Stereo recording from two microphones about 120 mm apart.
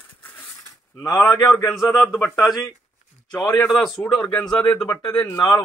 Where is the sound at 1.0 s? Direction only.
30° left (ahead or behind).